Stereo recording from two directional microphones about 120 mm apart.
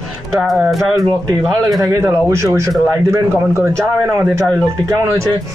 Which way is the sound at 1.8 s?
20° right (ahead or behind).